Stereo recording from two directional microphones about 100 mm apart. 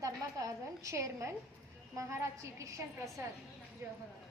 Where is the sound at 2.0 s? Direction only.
25° right (ahead or behind).